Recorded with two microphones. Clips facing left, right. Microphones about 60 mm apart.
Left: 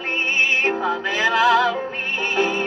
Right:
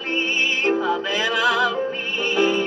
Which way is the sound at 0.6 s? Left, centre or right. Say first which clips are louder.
Right 1 dB; left.